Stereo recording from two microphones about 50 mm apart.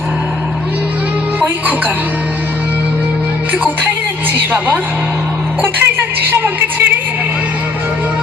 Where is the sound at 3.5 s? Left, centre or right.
Right.